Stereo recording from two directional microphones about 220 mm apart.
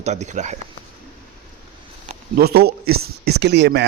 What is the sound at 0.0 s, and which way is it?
Speech, 30° right (ahead or behind).